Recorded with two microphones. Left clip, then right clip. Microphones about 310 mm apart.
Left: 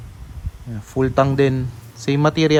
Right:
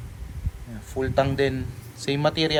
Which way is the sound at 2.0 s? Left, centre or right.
Left.